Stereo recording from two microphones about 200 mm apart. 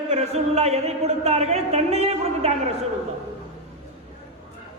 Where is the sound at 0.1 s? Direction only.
35° right (ahead or behind).